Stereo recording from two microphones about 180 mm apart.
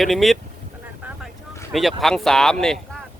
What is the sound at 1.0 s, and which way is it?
Vehicle, 10° right (ahead or behind).